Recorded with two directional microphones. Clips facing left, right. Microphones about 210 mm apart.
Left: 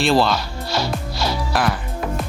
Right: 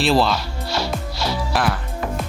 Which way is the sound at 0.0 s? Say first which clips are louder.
Left 1 dB; centre (ahead or behind).